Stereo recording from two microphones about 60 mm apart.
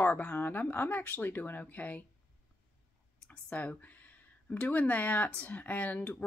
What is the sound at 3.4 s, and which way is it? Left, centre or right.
Speech, left.